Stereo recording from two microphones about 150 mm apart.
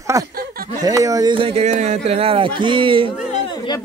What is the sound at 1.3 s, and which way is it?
Speech, 40° right (ahead or behind).